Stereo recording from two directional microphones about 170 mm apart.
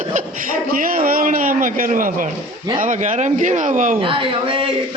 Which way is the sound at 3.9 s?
30° right (ahead or behind).